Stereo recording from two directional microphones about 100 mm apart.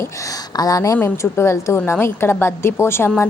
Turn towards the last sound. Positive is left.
turn(degrees=25)  # may be behind; listen again after turning